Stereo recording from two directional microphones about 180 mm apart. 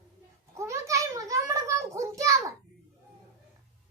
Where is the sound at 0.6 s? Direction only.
15° right (ahead or behind).